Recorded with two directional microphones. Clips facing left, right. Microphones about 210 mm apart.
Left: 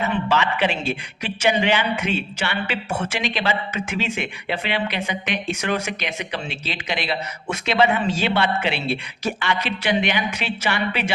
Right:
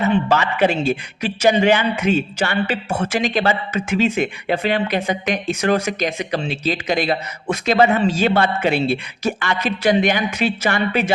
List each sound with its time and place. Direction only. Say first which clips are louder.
0.3 s a man's voice: right 4 dB; 45° right (ahead or behind)